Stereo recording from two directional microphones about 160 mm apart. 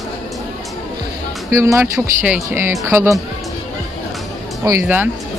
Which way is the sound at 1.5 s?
20° right (ahead or behind).